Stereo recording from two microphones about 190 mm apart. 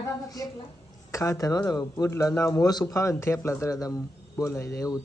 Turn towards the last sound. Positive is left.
turn(degrees=15)  # may be behind; listen again after turning